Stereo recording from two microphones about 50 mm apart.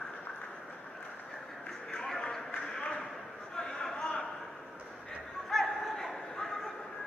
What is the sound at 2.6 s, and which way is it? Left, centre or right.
Clip-clop, centre.